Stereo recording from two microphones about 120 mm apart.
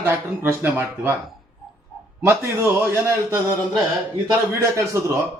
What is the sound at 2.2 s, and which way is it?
A man's voice, 20° right (ahead or behind).